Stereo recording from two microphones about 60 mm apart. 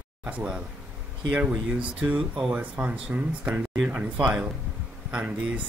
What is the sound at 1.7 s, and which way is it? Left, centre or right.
Speech, right.